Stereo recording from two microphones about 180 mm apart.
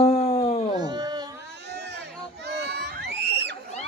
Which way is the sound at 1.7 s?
70° right (ahead or behind).